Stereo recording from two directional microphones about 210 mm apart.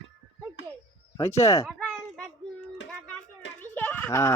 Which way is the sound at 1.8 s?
5° left (ahead or behind).